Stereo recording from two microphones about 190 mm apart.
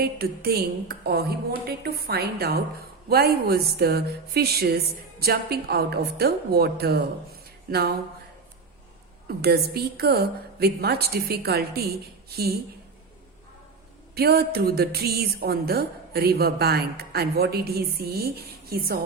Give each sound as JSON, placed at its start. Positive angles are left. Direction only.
{"t": 0.0, "sound": "a woman's voice", "side_deg": -55}
{"t": 9.2, "sound": "a woman's voice", "side_deg": -55}
{"t": 14.2, "sound": "a woman's voice", "side_deg": -55}